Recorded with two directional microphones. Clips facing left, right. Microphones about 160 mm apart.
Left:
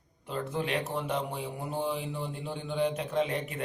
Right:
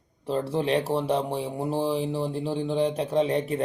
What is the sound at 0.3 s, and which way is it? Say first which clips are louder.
Speech: right 7 dB; 30° right (ahead or behind).